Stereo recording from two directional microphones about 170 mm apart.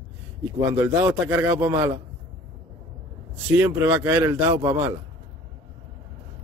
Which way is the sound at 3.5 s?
15° right (ahead or behind).